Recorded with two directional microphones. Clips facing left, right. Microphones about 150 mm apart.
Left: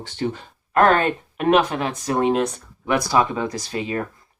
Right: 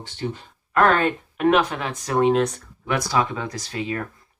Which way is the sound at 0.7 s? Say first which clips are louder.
Left 2 dB; 40° left (ahead or behind).